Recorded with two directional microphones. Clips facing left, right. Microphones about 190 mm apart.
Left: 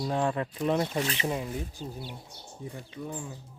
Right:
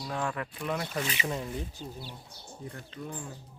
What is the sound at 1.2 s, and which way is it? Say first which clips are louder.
Speech: left 3 dB; 15° left (ahead or behind).